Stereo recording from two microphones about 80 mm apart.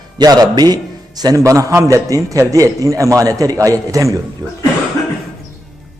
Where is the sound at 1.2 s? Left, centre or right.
Right.